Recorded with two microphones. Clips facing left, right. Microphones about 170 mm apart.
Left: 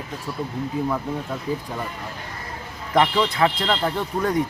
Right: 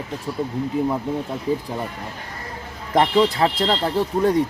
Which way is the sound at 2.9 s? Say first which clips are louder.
Right 2 dB; 35° right (ahead or behind).